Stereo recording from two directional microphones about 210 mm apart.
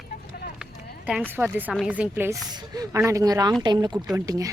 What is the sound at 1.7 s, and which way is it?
A woman's voice, 5° right (ahead or behind).